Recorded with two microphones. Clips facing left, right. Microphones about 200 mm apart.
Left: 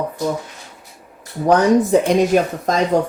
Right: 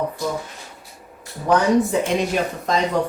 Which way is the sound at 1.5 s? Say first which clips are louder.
Left 4 dB; 40° left (ahead or behind).